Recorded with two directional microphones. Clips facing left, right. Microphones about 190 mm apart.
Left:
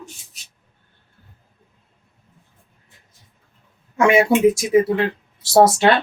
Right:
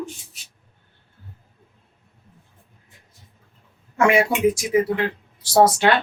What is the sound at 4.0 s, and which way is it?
Speech, 20° left (ahead or behind).